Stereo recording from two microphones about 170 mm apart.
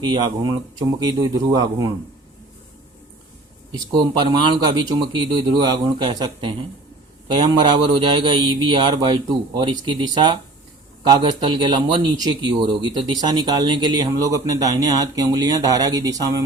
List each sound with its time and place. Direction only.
0.0 s speech: 25° right (ahead or behind)
3.7 s speech: 25° right (ahead or behind)